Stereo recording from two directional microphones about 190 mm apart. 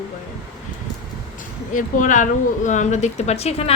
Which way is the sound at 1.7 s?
45° left (ahead or behind).